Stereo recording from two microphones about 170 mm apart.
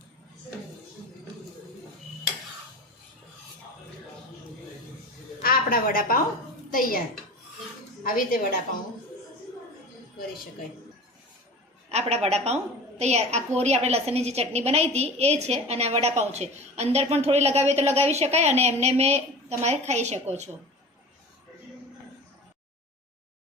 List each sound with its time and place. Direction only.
5.4 s a sound: 60° left (ahead or behind)
8.0 s a woman's voice: 55° left (ahead or behind)
11.9 s a woman's voice: 40° right (ahead or behind)